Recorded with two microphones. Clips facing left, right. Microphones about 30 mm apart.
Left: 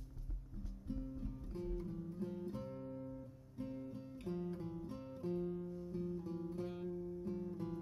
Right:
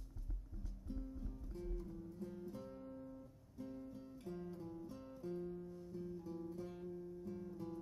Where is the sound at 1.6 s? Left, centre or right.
Left.